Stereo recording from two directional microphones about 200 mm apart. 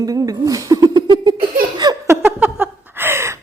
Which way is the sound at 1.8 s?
20° right (ahead or behind).